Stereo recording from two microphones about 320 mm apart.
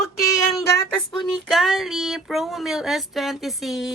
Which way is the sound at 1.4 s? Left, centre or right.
Centre.